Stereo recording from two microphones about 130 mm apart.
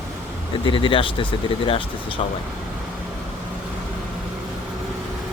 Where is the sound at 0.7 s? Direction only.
40° left (ahead or behind).